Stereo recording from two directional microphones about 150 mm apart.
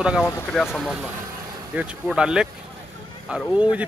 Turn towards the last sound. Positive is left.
turn(degrees=-10)  # may be behind; listen again after turning